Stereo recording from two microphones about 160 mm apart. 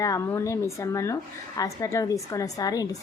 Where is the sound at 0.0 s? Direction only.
20° left (ahead or behind).